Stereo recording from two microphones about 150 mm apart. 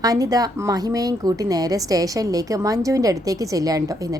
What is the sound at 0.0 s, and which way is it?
Speech, 25° right (ahead or behind).